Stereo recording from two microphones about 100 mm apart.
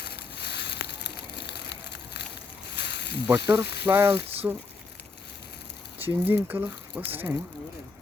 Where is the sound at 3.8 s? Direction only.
25° right (ahead or behind).